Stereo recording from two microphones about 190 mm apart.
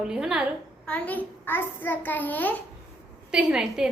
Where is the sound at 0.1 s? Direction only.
5° right (ahead or behind).